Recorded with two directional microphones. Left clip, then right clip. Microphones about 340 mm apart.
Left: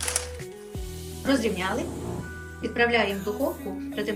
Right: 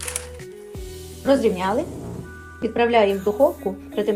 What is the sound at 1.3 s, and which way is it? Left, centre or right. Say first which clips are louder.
A woman's voice: right 7 dB; centre.